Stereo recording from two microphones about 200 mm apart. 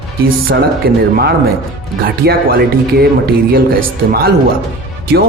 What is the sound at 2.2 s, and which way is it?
Speech, 50° right (ahead or behind).